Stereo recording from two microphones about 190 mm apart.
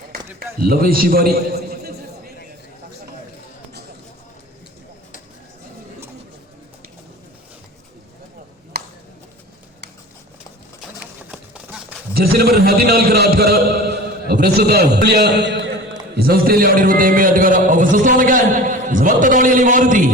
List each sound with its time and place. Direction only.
0.3 s a man's voice: 50° right (ahead or behind)
11.3 s a sound: 5° right (ahead or behind)
12.1 s a man's voice: 55° right (ahead or behind)